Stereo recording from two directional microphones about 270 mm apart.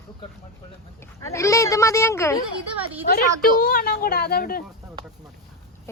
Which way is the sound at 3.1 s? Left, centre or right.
Left.